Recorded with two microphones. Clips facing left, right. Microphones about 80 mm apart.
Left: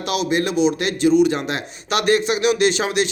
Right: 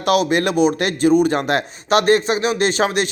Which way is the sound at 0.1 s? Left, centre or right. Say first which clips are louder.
Right 4 dB; right.